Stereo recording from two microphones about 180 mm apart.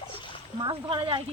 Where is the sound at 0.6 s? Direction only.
25° right (ahead or behind).